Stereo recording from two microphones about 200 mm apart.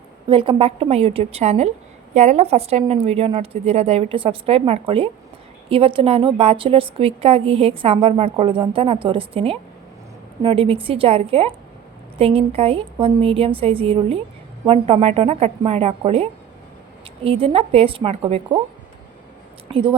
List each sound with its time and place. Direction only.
0.3 s a woman's voice: 25° right (ahead or behind)
19.6 s speech: 25° right (ahead or behind)